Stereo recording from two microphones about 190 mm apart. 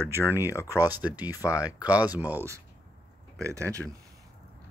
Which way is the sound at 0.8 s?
10° right (ahead or behind).